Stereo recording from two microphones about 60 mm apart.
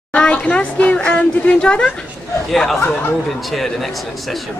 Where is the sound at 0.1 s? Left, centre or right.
Centre.